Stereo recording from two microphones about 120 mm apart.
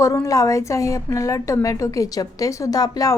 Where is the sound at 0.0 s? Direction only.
25° left (ahead or behind).